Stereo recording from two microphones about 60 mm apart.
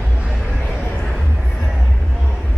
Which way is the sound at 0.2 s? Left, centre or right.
Centre.